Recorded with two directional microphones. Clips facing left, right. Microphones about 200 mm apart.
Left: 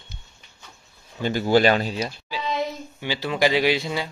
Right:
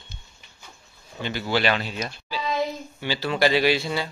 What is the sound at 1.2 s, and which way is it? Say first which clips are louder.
Speech: left 6 dB; 45° left (ahead or behind).